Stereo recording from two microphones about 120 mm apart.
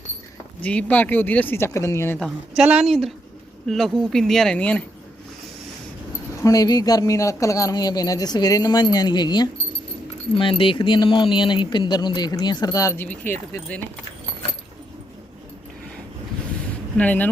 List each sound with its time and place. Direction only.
0.6 s speech: 10° left (ahead or behind)
2.1 s a woman's voice: centre (ahead or behind)
6.4 s speech: 30° left (ahead or behind)
13.0 s speech: 15° left (ahead or behind)
17.0 s speech: 15° left (ahead or behind)